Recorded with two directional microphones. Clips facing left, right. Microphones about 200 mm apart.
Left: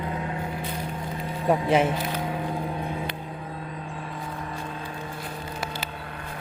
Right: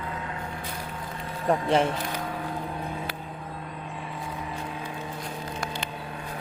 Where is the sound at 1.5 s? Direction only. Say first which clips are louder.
Left 2 dB; 5° left (ahead or behind).